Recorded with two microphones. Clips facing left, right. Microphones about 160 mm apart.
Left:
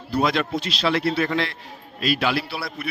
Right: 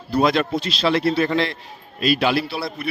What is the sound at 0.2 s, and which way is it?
A man's voice, 40° right (ahead or behind).